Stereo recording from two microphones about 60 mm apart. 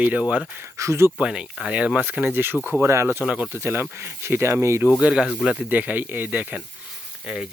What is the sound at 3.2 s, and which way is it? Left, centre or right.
Speech, right.